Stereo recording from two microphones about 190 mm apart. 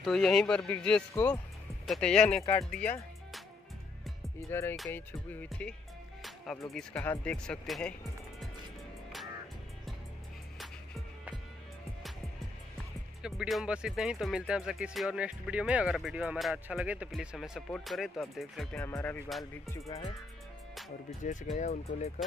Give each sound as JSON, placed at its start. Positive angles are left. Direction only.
{"t": 0.0, "sound": "speech", "side_deg": 0}
{"t": 2.8, "sound": "music", "side_deg": 10}
{"t": 4.5, "sound": "music", "side_deg": 15}
{"t": 6.7, "sound": "speech", "side_deg": 5}
{"t": 13.2, "sound": "speech", "side_deg": 0}
{"t": 18.9, "sound": "music", "side_deg": 10}
{"t": 19.2, "sound": "speech", "side_deg": 0}
{"t": 21.2, "sound": "speech", "side_deg": 40}